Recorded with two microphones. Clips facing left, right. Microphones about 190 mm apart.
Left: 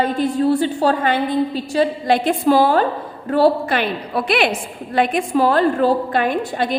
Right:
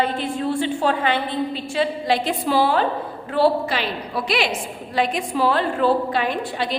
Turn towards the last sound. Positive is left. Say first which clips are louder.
# left 4 dB
turn(degrees=50)  # may be behind; listen again after turning